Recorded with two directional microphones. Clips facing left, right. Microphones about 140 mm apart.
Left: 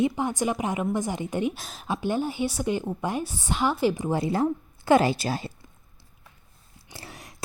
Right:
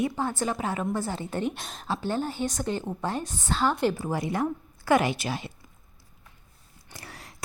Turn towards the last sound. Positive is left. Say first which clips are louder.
# left 2 dB
turn(degrees=20)  # may be behind; listen again after turning